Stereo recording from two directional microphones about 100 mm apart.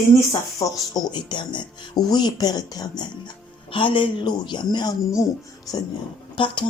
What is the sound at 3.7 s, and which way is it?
Speech, 60° left (ahead or behind).